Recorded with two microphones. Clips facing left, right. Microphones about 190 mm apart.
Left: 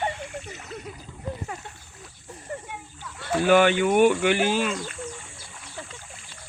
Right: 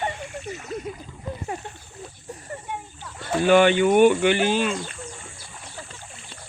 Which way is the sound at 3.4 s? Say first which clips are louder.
Right 2 dB; 5° left (ahead or behind).